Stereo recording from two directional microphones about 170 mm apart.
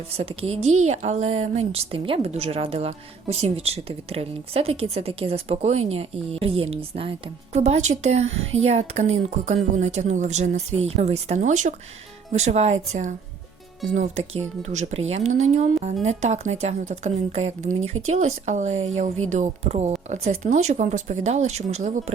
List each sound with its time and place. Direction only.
0.1 s a woman's voice: 35° right (ahead or behind)